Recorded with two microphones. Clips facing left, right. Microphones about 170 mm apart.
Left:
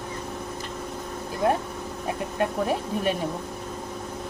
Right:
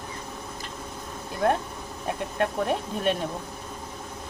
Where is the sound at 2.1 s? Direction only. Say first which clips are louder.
Even; 5° left (ahead or behind).